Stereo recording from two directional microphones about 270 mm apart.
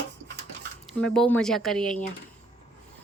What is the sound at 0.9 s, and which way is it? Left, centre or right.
A woman's voice, centre.